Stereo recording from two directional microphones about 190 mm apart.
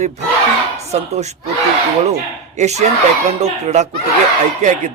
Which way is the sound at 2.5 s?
35° right (ahead or behind).